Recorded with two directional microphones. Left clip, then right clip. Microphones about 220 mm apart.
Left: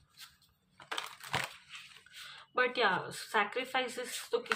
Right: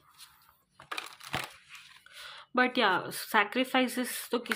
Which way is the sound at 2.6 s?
40° right (ahead or behind).